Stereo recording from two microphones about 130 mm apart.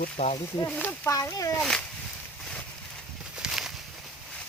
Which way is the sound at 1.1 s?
25° left (ahead or behind).